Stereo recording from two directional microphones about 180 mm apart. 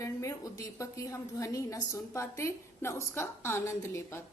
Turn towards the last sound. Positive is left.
turn(degrees=15)  # may be behind; listen again after turning